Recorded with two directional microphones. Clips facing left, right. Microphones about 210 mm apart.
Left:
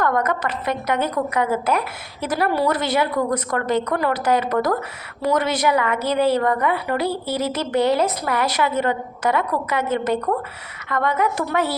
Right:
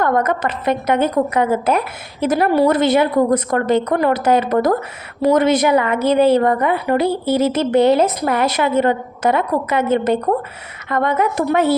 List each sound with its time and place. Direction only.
0.0 s a woman's voice: 25° right (ahead or behind)